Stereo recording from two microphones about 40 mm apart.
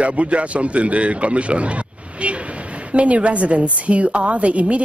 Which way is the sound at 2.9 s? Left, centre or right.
Right.